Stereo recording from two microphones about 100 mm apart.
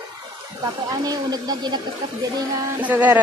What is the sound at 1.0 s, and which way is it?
Speech, 40° right (ahead or behind).